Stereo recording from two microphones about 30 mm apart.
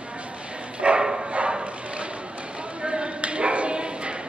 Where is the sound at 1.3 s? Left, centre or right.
Right.